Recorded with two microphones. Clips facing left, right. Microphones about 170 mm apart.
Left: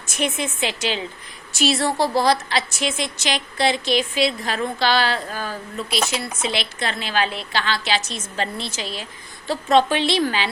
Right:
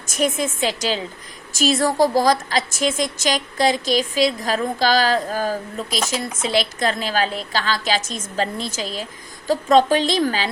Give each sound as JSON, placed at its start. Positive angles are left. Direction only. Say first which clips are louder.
{"t": 0.2, "sound": "a woman's voice", "louder": "right 3 dB", "side_deg": -45}